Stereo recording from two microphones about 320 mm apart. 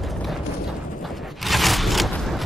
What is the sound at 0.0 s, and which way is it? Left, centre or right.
Clip-clop, centre.